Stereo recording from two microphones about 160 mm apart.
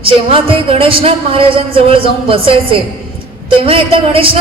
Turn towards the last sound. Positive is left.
turn(degrees=-35)  # may be behind; listen again after turning